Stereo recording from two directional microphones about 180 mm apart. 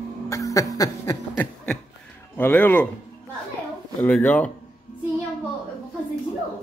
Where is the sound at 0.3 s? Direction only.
20° left (ahead or behind).